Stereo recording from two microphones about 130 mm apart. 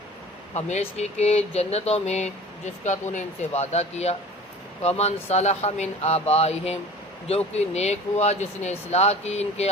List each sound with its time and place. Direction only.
0.5 s speech: 55° left (ahead or behind)